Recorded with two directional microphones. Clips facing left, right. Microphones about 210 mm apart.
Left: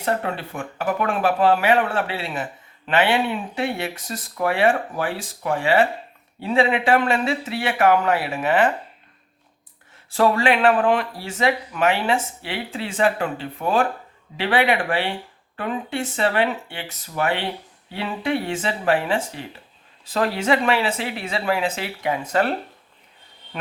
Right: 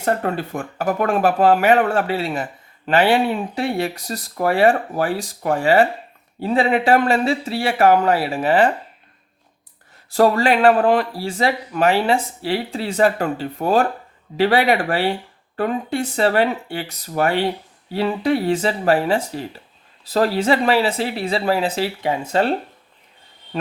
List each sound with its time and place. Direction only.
0.0 s speech: 45° right (ahead or behind)
10.1 s speech: 40° right (ahead or behind)